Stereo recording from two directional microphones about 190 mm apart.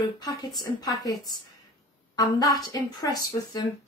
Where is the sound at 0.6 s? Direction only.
20° left (ahead or behind).